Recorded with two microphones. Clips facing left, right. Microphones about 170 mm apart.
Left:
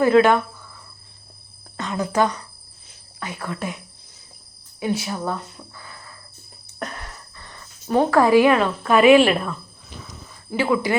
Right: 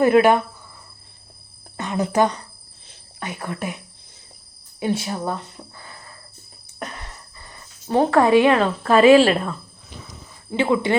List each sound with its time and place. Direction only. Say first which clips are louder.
0.0 s speech: right 1 dB; 15° right (ahead or behind)
1.7 s a woman's voice: right 2 dB; 20° right (ahead or behind)
4.8 s speech: right 1 dB; 30° right (ahead or behind)
7.9 s speech: even; 25° right (ahead or behind)